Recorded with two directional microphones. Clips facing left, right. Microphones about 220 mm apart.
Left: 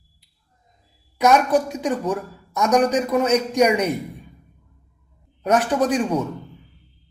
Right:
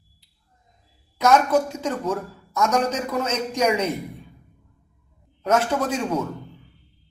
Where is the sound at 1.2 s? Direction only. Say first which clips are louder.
Left 1 dB; 15° left (ahead or behind).